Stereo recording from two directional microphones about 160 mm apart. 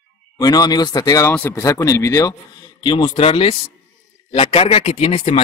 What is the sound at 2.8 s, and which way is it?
Speech, 30° left (ahead or behind).